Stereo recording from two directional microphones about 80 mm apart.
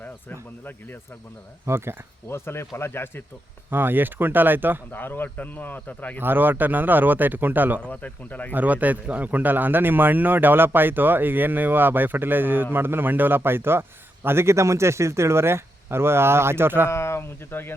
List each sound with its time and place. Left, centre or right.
0.0 s speech: left
1.6 s speech: right
2.3 s speech: left
3.7 s speech: right
4.9 s speech: left
6.1 s speech: right
7.8 s speech: centre
8.5 s speech: centre
16.9 s speech: left